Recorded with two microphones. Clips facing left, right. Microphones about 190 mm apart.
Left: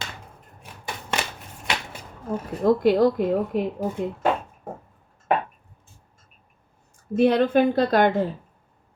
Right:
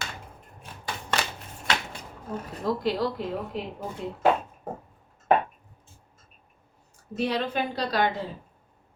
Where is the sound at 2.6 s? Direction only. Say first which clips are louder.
Left 9 dB; 50° left (ahead or behind).